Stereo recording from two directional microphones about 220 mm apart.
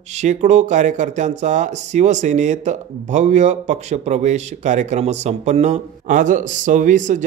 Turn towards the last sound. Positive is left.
turn(degrees=-35)  # may be behind; listen again after turning